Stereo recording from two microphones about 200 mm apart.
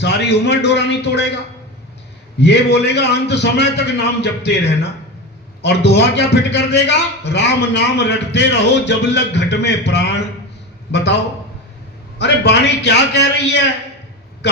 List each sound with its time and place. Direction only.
0.0 s a man's voice: 60° left (ahead or behind)
2.4 s a man's voice: 55° left (ahead or behind)
12.2 s a man's voice: 60° left (ahead or behind)